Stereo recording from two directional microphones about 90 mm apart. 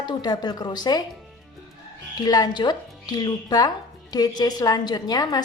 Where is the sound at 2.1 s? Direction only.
45° left (ahead or behind).